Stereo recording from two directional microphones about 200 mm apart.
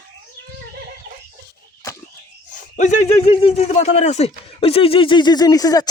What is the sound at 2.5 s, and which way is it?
Speech, 40° left (ahead or behind).